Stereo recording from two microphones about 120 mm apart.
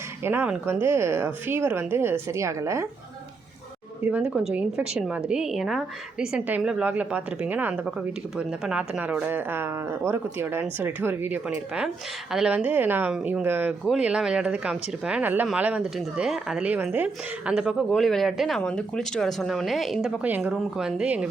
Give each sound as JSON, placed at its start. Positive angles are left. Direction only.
{"t": 0.3, "sound": "a woman's voice", "side_deg": -15}
{"t": 4.1, "sound": "a woman's voice", "side_deg": -10}
{"t": 20.2, "sound": "a woman's voice", "side_deg": -15}